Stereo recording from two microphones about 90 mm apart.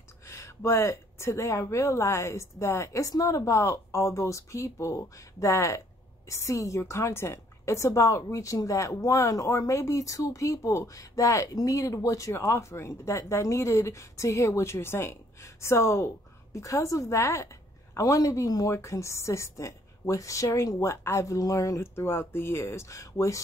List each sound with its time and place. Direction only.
0.3 s a woman's voice: 30° left (ahead or behind)